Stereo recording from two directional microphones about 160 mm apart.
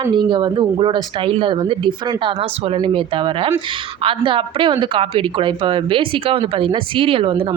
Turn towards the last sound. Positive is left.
turn(degrees=-30)  # may be behind; listen again after turning